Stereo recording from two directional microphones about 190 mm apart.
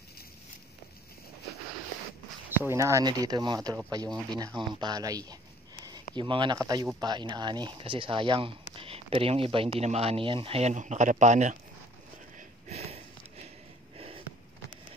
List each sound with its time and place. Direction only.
2.5 s speech: 15° right (ahead or behind); by 11.5 s 40° right (ahead or behind)
12.4 s a sound: 35° right (ahead or behind)
13.9 s snort: 30° right (ahead or behind)